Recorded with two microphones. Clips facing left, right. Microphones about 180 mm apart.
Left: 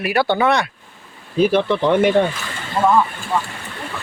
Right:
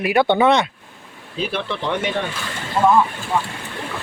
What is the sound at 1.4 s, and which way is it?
Speech, 45° left (ahead or behind).